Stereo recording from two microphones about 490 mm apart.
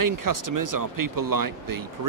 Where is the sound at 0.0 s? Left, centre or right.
Right.